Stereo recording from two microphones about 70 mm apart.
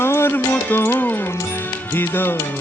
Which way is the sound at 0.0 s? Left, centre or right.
Left.